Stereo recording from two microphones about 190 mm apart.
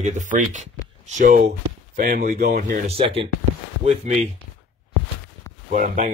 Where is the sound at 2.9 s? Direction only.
30° right (ahead or behind).